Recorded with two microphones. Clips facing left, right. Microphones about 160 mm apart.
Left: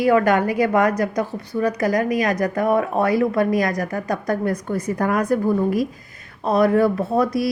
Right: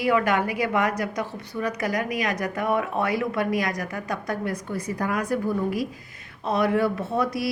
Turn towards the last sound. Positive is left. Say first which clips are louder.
# left 6 dB
turn(degrees=40)  # may be behind; listen again after turning